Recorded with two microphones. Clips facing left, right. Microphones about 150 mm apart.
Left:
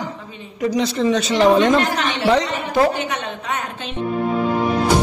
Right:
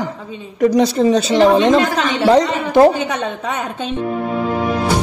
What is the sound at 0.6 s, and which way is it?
A woman's voice, 40° right (ahead or behind).